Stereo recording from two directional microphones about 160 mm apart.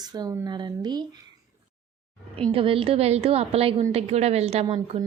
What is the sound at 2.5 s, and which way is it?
A woman's voice, 35° right (ahead or behind).